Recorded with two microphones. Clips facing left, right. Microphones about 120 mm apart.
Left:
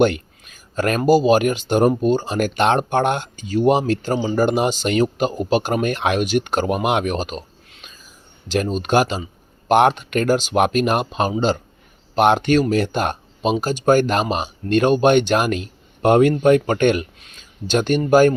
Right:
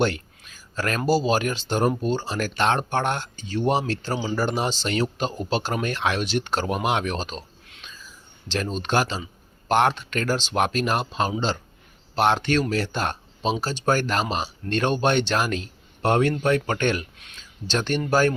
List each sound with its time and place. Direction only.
0.8 s speech: 15° left (ahead or behind)
8.4 s speech: 10° left (ahead or behind)